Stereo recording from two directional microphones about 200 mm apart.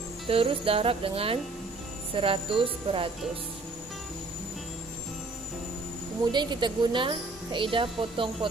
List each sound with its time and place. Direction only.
0.3 s a woman's voice: 30° right (ahead or behind)
6.3 s a woman's voice: 20° right (ahead or behind)